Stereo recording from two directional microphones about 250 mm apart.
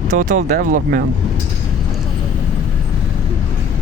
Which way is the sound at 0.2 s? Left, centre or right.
Right.